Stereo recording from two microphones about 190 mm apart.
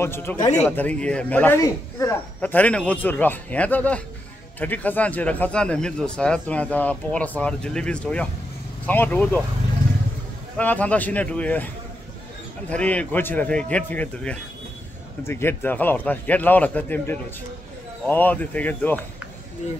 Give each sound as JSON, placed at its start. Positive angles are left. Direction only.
{"t": 0.0, "sound": "speech", "side_deg": 10}
{"t": 0.4, "sound": "speech", "side_deg": 40}
{"t": 0.7, "sound": "speech", "side_deg": 10}
{"t": 10.6, "sound": "speech", "side_deg": 10}